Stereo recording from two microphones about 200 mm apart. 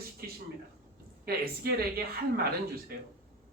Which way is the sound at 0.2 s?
50° right (ahead or behind).